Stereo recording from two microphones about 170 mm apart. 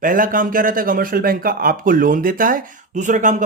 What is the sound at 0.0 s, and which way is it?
Speech, 55° right (ahead or behind).